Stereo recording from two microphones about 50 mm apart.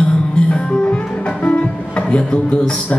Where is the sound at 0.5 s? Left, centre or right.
Centre.